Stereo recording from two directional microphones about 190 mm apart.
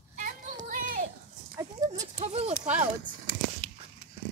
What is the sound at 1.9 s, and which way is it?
Speech, 35° right (ahead or behind).